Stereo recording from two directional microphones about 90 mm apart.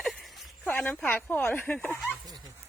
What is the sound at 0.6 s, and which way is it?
Speech, 15° left (ahead or behind).